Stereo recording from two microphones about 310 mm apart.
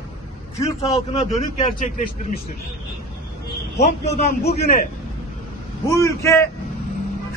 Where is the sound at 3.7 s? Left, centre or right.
Left.